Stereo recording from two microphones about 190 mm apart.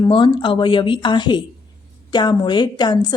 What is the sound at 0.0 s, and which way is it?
A woman's voice, 25° left (ahead or behind).